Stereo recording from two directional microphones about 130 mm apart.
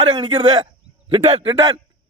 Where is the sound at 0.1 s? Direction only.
35° right (ahead or behind).